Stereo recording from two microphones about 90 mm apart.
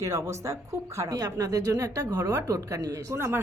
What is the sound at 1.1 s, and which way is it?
A woman's voice, 45° right (ahead or behind).